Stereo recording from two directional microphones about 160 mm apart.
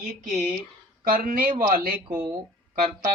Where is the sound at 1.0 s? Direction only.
65° right (ahead or behind).